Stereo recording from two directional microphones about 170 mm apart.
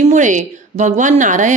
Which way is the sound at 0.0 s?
45° right (ahead or behind).